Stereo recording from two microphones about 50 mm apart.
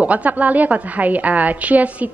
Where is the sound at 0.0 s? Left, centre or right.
Right.